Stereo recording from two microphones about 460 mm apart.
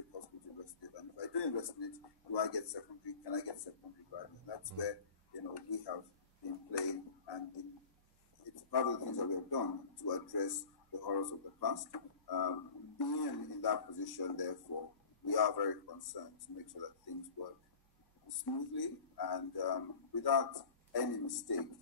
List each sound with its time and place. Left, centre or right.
0.8 s a sound: left
2.3 s speech: left
8.5 s speech: left